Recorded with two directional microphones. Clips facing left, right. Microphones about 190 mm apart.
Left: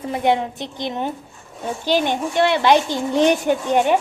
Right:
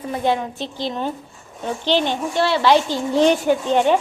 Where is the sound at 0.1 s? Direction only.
20° left (ahead or behind).